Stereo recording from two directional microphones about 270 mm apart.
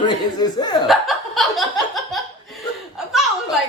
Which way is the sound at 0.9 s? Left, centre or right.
Centre.